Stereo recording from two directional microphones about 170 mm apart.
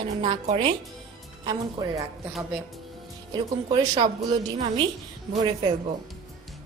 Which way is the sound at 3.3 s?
25° right (ahead or behind).